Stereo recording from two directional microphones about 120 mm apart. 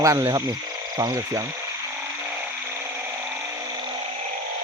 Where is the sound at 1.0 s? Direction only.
35° right (ahead or behind).